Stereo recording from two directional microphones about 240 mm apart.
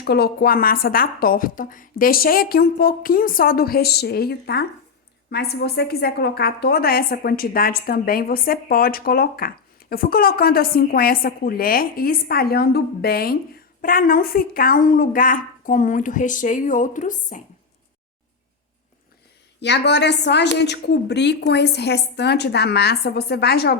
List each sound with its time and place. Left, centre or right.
0.0 s a woman's voice: left
19.5 s a woman's voice: left